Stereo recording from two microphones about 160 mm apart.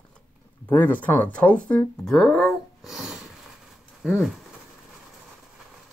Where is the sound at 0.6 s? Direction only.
10° left (ahead or behind).